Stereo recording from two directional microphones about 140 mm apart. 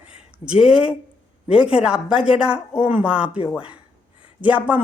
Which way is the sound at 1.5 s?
5° right (ahead or behind).